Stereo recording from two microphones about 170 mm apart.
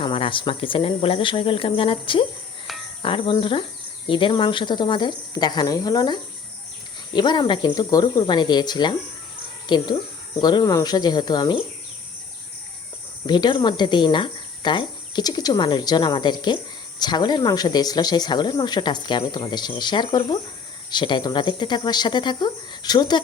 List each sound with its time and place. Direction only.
0.0 s speech: 30° left (ahead or behind)
13.2 s speech: 25° left (ahead or behind)